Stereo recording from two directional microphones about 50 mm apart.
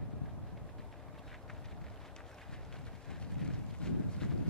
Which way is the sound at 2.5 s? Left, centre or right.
Centre.